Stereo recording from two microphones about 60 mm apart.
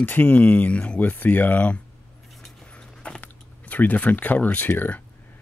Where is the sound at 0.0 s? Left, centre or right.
Left.